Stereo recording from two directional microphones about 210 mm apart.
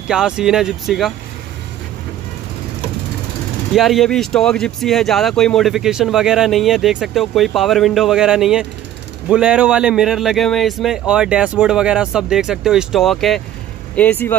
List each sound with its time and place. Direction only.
0.1 s speech: 5° right (ahead or behind)
3.7 s speech: centre (ahead or behind)